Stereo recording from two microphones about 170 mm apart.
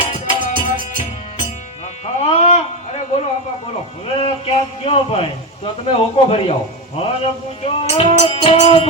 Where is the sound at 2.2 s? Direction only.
35° left (ahead or behind).